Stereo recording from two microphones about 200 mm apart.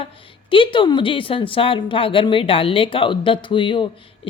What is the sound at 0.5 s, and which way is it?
A woman's voice, 25° left (ahead or behind).